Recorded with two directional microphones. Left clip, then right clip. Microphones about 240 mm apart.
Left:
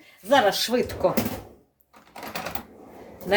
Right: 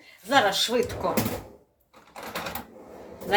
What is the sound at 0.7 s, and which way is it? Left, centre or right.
Speech, left.